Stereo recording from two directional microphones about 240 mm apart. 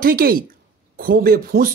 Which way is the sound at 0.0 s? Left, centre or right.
Right.